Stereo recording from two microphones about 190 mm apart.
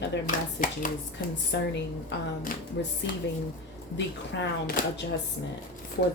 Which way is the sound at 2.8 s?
65° left (ahead or behind).